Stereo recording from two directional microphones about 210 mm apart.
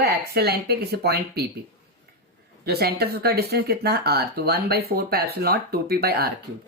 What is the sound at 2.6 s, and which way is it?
Speech, 50° right (ahead or behind).